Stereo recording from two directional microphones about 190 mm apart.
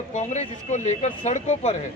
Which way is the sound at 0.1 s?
40° left (ahead or behind).